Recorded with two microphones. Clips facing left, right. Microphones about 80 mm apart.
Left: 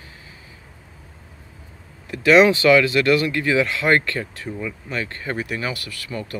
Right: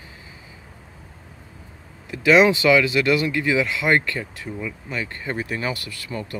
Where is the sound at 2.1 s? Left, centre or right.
Centre.